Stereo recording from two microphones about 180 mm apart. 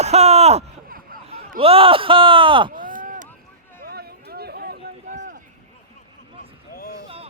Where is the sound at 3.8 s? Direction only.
60° right (ahead or behind).